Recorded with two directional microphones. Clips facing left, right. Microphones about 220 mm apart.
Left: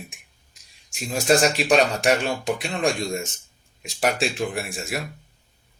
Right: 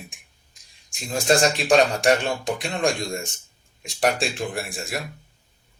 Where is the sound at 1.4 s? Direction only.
30° right (ahead or behind).